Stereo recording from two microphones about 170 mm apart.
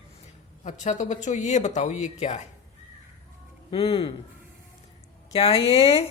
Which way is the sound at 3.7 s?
35° left (ahead or behind).